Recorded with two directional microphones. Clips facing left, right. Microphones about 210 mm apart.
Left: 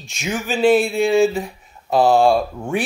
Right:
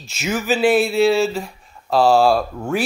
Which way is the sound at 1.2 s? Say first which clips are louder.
Left 4 dB; centre (ahead or behind).